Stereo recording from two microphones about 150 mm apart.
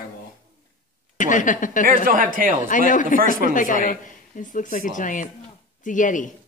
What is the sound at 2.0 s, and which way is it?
Speech, 65° right (ahead or behind).